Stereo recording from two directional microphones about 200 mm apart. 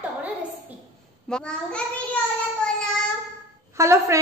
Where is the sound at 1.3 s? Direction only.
5° left (ahead or behind).